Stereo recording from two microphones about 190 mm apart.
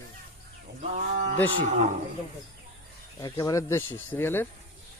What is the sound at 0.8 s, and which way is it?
Livestock, 35° right (ahead or behind).